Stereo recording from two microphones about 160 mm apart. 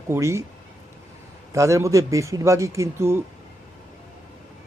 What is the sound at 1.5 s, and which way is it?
Speech, 20° right (ahead or behind).